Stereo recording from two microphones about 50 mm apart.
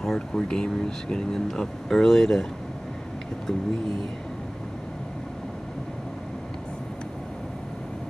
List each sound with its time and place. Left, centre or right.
0.0 s speech: centre